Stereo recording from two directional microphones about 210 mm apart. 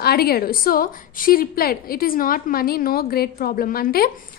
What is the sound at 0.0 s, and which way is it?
A woman's voice, 50° left (ahead or behind).